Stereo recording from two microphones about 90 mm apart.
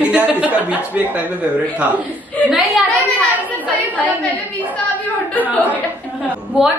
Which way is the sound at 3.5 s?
15° left (ahead or behind).